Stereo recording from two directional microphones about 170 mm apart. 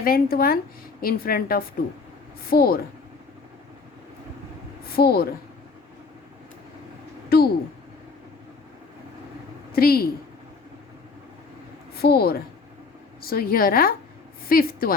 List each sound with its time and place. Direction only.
0.0 s a woman's voice: 60° left (ahead or behind)
4.9 s a woman's voice: 65° left (ahead or behind)
7.3 s a sound: 65° left (ahead or behind)
9.7 s a woman's voice: 60° left (ahead or behind)
12.0 s a woman's voice: 65° left (ahead or behind)